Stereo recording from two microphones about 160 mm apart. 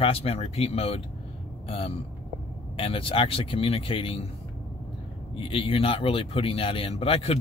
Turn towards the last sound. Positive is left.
turn(degrees=35)  # may be behind; listen again after turning